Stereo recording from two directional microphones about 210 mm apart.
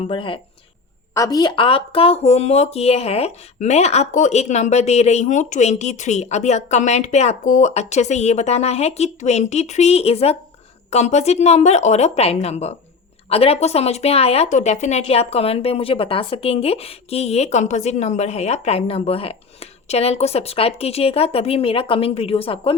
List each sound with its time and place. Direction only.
0.1 s speech: 25° left (ahead or behind)